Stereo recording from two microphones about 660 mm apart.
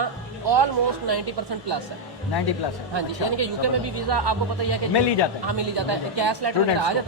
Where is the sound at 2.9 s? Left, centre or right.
Right.